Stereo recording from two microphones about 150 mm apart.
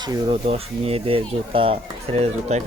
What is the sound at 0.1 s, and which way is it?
Speech, 35° right (ahead or behind).